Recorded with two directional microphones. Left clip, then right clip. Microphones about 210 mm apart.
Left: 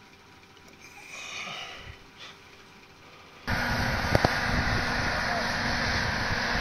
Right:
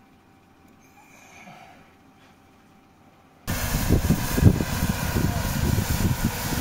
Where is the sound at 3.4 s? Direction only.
65° right (ahead or behind).